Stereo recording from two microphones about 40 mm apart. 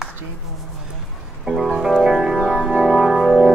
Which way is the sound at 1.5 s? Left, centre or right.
Centre.